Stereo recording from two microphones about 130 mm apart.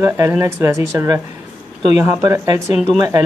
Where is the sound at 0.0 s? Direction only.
20° right (ahead or behind).